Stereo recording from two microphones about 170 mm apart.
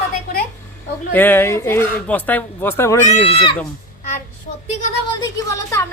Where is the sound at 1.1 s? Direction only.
10° left (ahead or behind).